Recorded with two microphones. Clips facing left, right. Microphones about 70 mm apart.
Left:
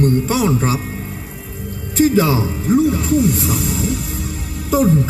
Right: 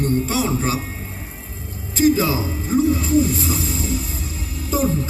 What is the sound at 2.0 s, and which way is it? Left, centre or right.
Speech, left.